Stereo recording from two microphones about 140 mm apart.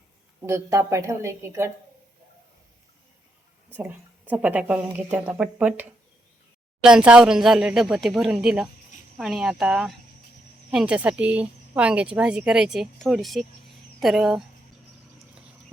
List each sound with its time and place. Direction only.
0.4 s a woman's voice: 20° right (ahead or behind)
3.7 s a woman's voice: 15° right (ahead or behind)